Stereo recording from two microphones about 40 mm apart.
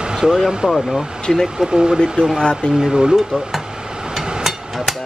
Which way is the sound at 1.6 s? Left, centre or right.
Centre.